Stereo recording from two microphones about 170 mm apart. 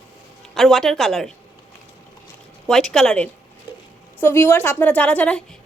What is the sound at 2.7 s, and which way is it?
A woman's voice, centre (ahead or behind).